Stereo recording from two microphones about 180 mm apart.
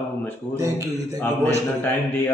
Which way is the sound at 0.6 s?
15° right (ahead or behind).